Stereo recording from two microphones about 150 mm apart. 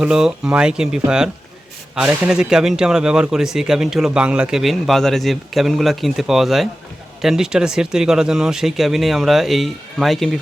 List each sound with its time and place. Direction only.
0.0 s speech: 5° right (ahead or behind)